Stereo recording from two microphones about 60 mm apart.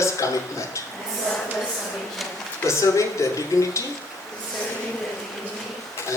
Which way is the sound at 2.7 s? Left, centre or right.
Left.